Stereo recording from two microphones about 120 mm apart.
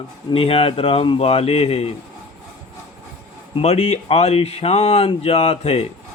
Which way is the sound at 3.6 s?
60° left (ahead or behind).